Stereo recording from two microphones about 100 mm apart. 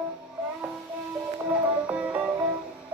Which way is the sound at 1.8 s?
15° right (ahead or behind).